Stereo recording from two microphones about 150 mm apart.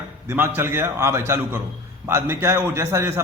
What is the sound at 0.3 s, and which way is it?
A man's voice, 15° right (ahead or behind).